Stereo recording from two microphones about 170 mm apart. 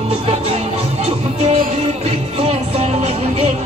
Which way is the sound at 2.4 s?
40° right (ahead or behind).